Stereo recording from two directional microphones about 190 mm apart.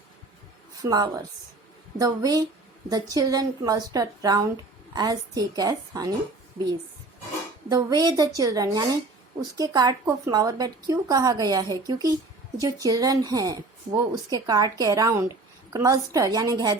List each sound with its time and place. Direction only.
0.8 s speech: 20° right (ahead or behind)
7.7 s speech: 20° right (ahead or behind)